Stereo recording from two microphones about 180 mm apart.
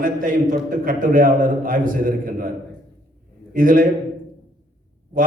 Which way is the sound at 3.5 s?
50° right (ahead or behind).